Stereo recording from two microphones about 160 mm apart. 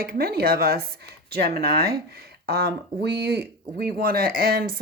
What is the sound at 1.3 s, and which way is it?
Speech, 90° right.